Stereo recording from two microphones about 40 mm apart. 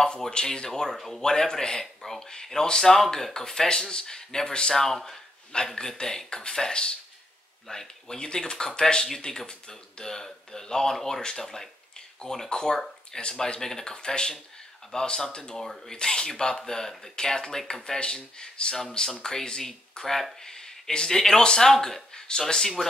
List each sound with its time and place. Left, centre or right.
0.5 s speech: centre
1.3 s speech: centre
4.9 s a man's voice: centre
5.8 s speech: centre
7.6 s speech: centre